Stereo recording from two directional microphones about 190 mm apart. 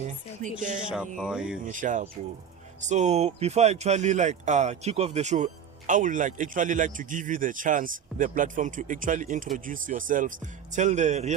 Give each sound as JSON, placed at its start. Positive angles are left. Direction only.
{"t": 0.4, "sound": "speech", "side_deg": -40}
{"t": 1.2, "sound": "speech", "side_deg": -5}
{"t": 1.6, "sound": "speech", "side_deg": -40}